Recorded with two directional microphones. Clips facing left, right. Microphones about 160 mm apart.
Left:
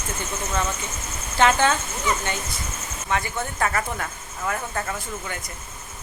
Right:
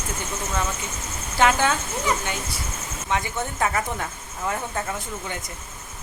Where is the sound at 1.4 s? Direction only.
10° right (ahead or behind).